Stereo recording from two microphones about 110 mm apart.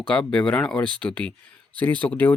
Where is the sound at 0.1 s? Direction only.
10° left (ahead or behind).